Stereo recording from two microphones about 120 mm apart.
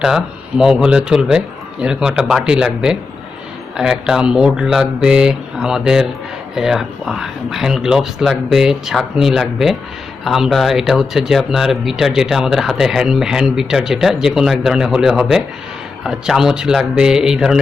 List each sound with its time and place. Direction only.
0.0 s speech: 5° right (ahead or behind)